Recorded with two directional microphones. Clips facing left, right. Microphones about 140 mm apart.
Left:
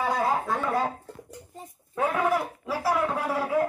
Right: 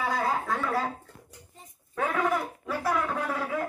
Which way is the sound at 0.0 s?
20° left (ahead or behind).